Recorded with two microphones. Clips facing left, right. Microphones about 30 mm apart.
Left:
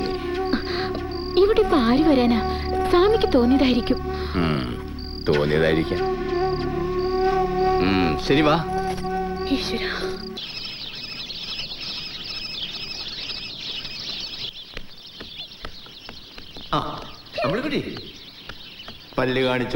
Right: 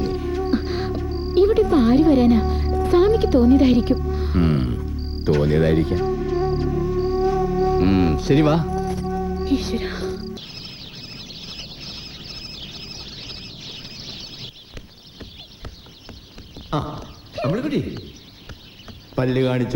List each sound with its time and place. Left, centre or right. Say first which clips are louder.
0.0 s music: right 1 dB; left
16.6 s a sound: left 1 dB; left
19.1 s speech: right 1 dB; left